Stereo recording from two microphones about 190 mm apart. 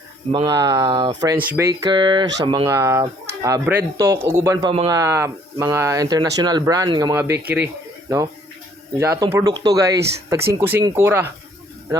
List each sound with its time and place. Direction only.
0.3 s speech: 25° right (ahead or behind)
4.7 s speech: 30° right (ahead or behind)
4.9 s speech: 15° right (ahead or behind)
9.0 s speech: 15° right (ahead or behind)